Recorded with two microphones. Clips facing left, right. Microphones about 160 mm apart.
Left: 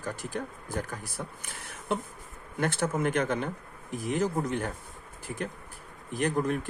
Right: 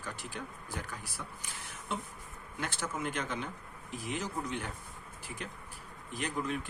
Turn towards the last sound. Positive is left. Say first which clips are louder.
# left 8 dB
turn(degrees=50)  # may be behind; listen again after turning